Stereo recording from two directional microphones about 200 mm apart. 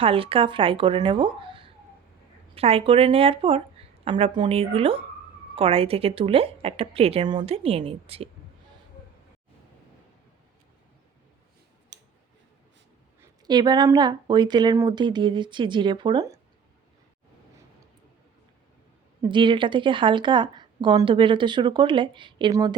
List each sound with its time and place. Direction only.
0.0 s speech: 25° right (ahead or behind)
11.9 s a sound: 60° right (ahead or behind)
13.5 s speech: 20° right (ahead or behind)
19.2 s speech: 25° right (ahead or behind)